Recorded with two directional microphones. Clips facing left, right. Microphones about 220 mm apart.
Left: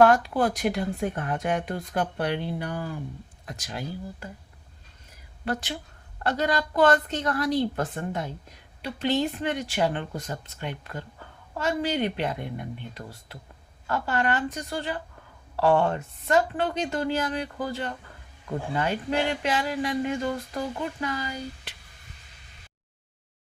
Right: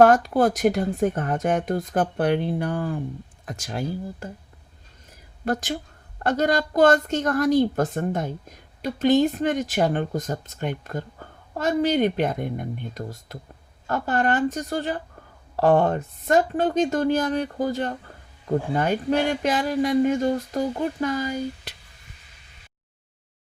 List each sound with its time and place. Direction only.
0.0 s speech: 45° right (ahead or behind)
5.5 s speech: 45° right (ahead or behind)